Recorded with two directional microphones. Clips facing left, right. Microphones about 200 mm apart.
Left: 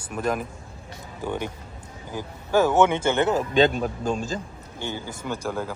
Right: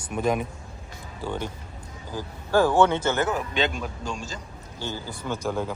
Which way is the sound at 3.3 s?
35° left (ahead or behind).